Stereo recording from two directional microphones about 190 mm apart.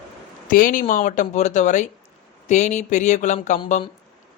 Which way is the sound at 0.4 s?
45° left (ahead or behind).